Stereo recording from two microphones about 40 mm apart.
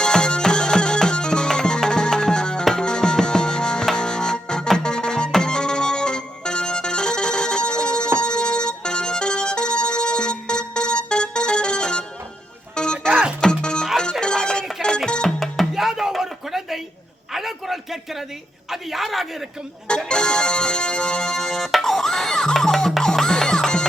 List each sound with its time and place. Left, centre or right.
0.0 s music: left
15.4 s music: centre
17.3 s a sound: centre
20.1 s music: left
21.3 s music: centre